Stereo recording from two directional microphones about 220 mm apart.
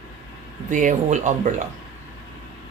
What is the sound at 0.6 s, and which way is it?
Speech, 35° right (ahead or behind).